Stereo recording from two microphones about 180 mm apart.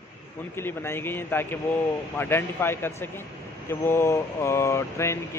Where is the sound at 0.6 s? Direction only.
15° left (ahead or behind).